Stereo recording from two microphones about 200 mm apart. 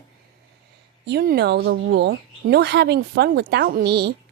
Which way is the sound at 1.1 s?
55° right (ahead or behind).